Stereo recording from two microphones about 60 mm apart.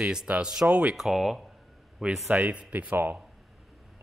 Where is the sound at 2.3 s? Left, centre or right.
Right.